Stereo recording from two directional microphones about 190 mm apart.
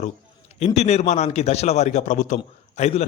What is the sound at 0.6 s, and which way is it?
A man's voice, 35° left (ahead or behind).